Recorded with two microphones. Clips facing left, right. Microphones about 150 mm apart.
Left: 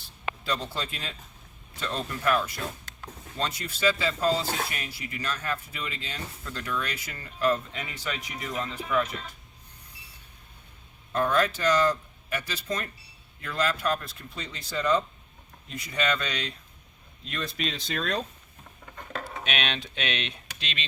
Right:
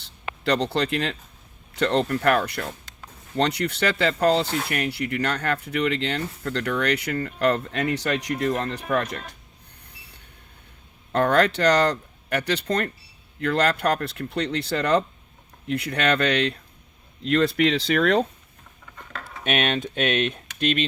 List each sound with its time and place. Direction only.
0.0 s a sound: 75° right (ahead or behind)
1.7 s speech: 70° right (ahead or behind)
11.1 s speech: 65° right (ahead or behind)
19.5 s speech: 50° right (ahead or behind)